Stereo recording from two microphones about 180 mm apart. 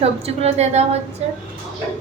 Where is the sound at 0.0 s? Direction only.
35° right (ahead or behind).